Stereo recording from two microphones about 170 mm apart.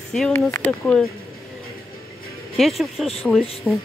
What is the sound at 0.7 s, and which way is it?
Speech, 5° left (ahead or behind).